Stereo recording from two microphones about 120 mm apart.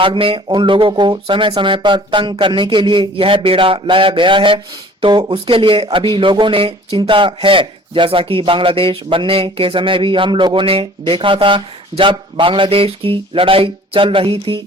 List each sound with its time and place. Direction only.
0.0 s speech: 45° right (ahead or behind)